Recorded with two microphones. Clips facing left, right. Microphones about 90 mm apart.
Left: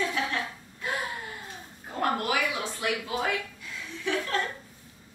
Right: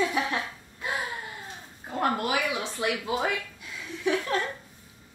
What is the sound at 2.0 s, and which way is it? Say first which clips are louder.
Speech: right 1 dB; 25° right (ahead or behind).